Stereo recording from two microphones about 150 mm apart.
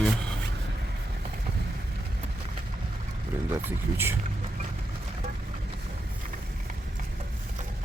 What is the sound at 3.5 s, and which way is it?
Speech, 15° right (ahead or behind).